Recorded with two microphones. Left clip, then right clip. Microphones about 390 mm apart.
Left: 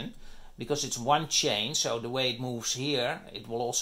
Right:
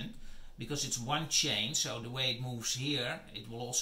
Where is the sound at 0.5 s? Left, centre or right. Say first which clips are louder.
Left 6 dB; centre.